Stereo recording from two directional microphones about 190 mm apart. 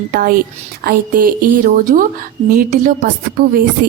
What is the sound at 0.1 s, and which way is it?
A woman's voice, 50° right (ahead or behind).